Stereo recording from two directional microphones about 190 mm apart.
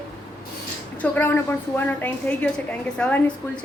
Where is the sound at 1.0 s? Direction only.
10° left (ahead or behind).